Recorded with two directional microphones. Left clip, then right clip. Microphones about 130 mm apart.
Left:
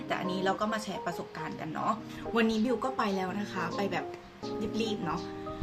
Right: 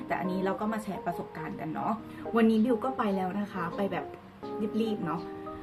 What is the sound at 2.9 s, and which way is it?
A woman's voice, 15° left (ahead or behind).